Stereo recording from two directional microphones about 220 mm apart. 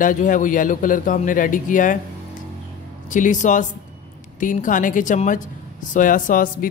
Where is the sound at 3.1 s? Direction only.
35° left (ahead or behind).